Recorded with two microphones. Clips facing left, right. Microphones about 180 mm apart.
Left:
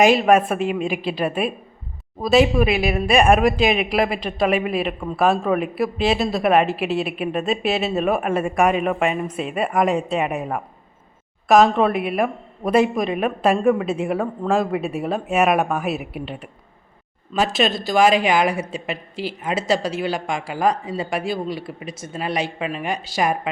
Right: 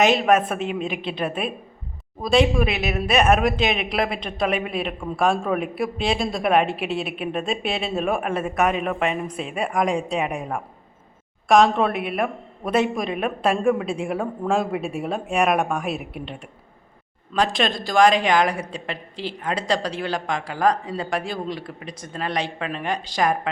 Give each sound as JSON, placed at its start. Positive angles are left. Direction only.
{"t": 0.0, "sound": "a woman's voice", "side_deg": 5}